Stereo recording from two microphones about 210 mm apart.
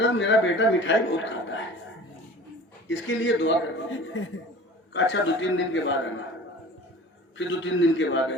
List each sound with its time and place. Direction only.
0.0 s speech: 60° left (ahead or behind)
3.2 s speech: 60° left (ahead or behind)
7.3 s speech: 65° left (ahead or behind)